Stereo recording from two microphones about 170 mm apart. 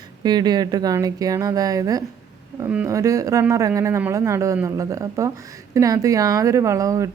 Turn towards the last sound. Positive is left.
turn(degrees=-20)  # may be behind; listen again after turning